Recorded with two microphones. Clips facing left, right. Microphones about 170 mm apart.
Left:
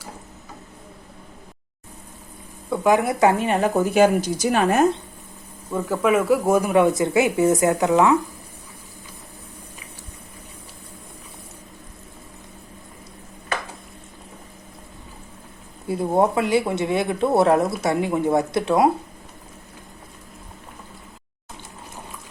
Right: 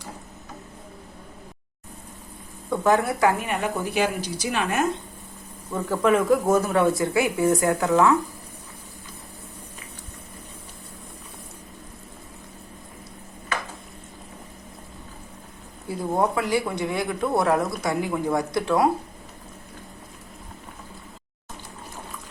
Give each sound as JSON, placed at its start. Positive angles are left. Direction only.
{"t": 2.6, "sound": "speech", "side_deg": 10}
{"t": 3.8, "sound": "speech", "side_deg": 45}
{"t": 5.7, "sound": "speech", "side_deg": 5}
{"t": 16.1, "sound": "speech", "side_deg": 20}